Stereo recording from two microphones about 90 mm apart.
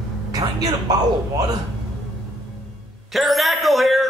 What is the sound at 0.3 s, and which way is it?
Speech, 45° right (ahead or behind).